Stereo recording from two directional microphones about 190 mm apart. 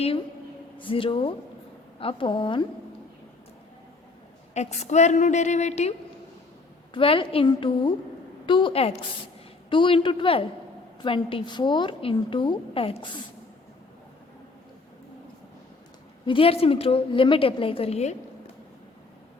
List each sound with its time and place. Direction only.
0.8 s a woman's voice: 25° left (ahead or behind)
4.5 s a woman's voice: 35° left (ahead or behind)
6.9 s a woman's voice: 25° left (ahead or behind)
16.2 s a woman's voice: 30° left (ahead or behind)